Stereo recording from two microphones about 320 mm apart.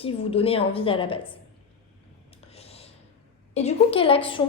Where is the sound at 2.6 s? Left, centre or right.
Centre.